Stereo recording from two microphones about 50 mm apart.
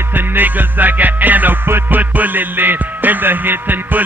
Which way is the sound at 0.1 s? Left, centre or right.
Right.